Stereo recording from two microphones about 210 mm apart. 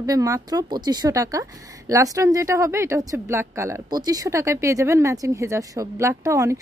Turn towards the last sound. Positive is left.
turn(degrees=-15)  # may be behind; listen again after turning